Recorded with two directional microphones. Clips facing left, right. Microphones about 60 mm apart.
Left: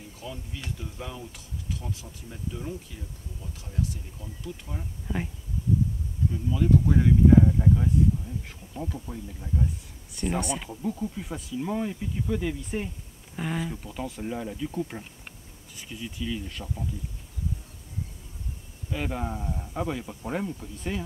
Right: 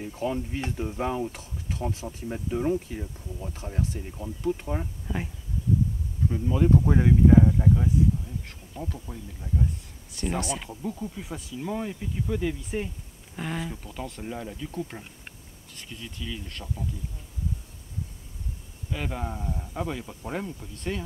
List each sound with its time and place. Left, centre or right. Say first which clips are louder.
0.2 s speech: right 10 dB; right
0.6 s speech: right 8 dB; right
5.0 s speech: left 1 dB; centre
6.3 s speech: right 2 dB; right
7.2 s speech: even; centre
18.9 s speech: left 1 dB; centre